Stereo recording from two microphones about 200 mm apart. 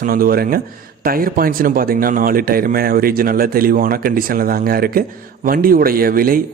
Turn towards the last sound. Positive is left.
turn(degrees=-45)  # may be behind; listen again after turning